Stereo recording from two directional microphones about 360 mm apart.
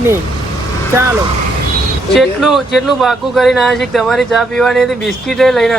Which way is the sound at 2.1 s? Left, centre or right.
Centre.